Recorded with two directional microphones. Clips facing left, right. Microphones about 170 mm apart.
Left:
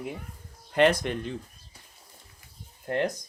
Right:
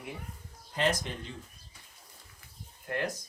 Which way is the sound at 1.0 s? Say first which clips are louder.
Left 9 dB; 60° left (ahead or behind).